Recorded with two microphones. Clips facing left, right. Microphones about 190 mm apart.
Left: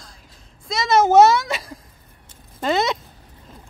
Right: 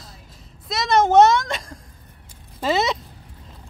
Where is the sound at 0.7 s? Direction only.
Centre (ahead or behind).